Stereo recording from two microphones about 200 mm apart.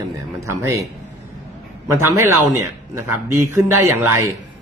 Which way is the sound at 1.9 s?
15° right (ahead or behind).